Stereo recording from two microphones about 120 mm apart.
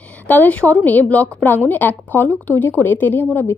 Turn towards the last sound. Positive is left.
turn(degrees=15)  # may be behind; listen again after turning